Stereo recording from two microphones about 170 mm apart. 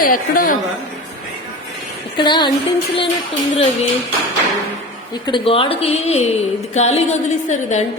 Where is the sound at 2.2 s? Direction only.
25° left (ahead or behind).